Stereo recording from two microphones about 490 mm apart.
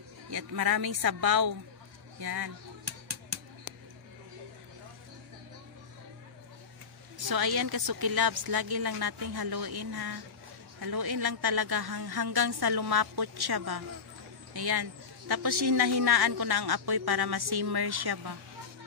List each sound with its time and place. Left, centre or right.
0.3 s a man's voice: right
7.2 s a man's voice: right